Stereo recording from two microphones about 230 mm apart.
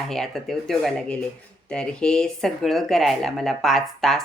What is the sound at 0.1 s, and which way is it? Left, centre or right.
Speech, centre.